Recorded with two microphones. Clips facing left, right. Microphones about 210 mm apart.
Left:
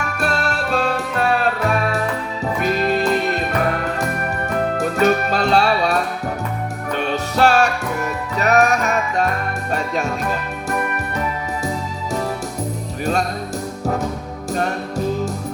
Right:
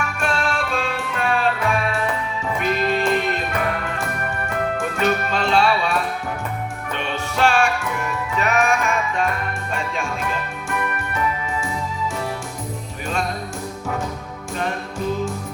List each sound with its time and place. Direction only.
0.2 s music: 40° left (ahead or behind)
4.8 s music: 40° left (ahead or behind)
14.5 s music: 40° left (ahead or behind)